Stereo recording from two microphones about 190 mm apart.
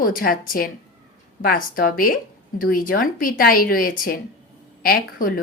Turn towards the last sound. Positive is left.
turn(degrees=50)  # may be behind; listen again after turning